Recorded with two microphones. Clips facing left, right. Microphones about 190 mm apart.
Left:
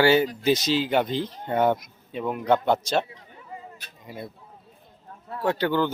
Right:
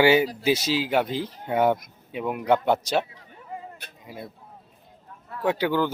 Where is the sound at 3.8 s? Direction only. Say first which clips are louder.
Right 4 dB; 60° right (ahead or behind).